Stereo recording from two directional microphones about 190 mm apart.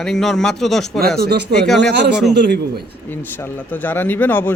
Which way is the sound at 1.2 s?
60° right (ahead or behind).